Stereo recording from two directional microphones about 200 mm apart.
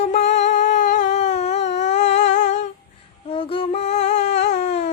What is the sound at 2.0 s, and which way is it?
Humming, 35° left (ahead or behind).